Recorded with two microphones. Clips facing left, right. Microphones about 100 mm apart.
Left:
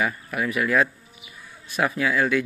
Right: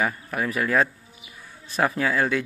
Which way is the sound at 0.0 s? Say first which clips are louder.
Even; 35° right (ahead or behind).